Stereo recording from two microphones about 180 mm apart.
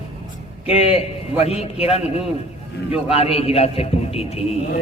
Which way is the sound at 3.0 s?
35° left (ahead or behind).